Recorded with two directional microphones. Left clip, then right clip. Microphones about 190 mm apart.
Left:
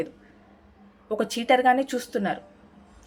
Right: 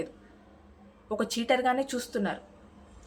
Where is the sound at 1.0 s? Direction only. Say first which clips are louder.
Left 4 dB; 35° left (ahead or behind).